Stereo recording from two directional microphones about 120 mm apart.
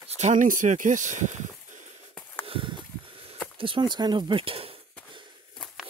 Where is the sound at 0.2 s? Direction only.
90° right.